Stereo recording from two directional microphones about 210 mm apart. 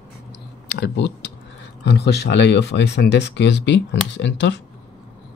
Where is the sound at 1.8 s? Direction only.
55° left (ahead or behind).